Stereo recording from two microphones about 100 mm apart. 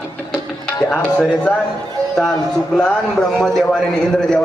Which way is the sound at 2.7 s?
10° left (ahead or behind).